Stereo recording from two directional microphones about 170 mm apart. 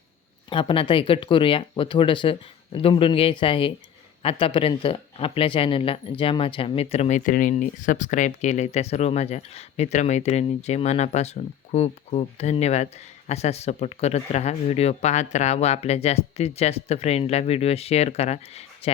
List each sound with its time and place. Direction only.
0.5 s speech: 30° left (ahead or behind)
7.3 s speech: 50° left (ahead or behind)